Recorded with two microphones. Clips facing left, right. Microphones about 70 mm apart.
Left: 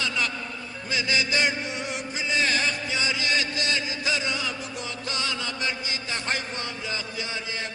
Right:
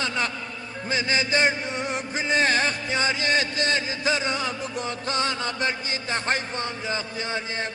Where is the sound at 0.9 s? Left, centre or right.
Right.